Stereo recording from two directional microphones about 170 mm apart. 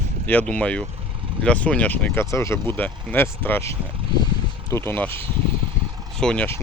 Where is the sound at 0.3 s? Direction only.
10° left (ahead or behind).